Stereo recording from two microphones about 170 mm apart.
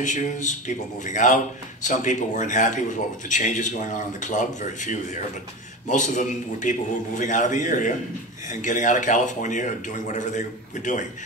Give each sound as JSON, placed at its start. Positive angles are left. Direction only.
{"t": 0.0, "sound": "speech", "side_deg": 45}